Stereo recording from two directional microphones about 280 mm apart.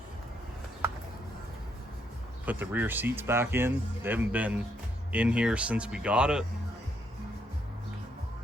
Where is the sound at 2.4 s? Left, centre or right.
Centre.